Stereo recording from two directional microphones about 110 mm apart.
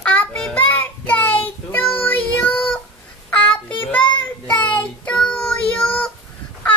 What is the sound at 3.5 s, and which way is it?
Child singing, 15° left (ahead or behind).